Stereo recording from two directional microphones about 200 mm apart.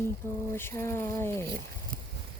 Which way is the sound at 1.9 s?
45° right (ahead or behind).